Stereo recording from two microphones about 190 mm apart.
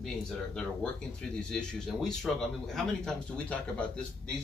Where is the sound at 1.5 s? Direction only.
5° left (ahead or behind).